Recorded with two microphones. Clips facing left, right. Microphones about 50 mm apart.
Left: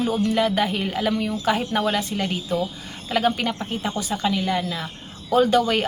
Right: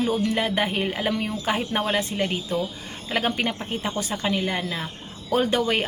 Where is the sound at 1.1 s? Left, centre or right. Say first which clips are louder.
Left 3 dB; right.